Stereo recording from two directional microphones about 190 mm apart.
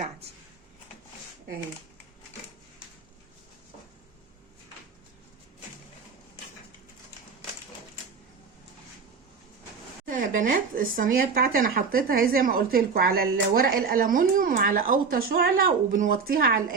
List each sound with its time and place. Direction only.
10.1 s speech: 45° right (ahead or behind)